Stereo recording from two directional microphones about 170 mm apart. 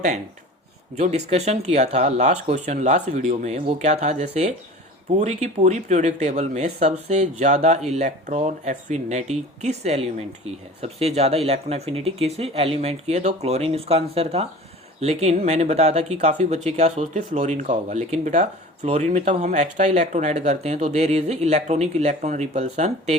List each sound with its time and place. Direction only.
0.9 s speech: 40° right (ahead or behind)